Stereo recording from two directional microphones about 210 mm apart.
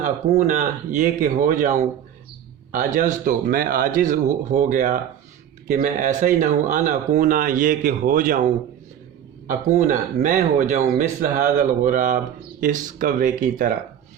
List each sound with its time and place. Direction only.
0.0 s speech: 35° right (ahead or behind)